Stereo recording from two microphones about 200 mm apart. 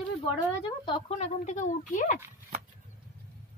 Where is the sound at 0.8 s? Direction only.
30° left (ahead or behind).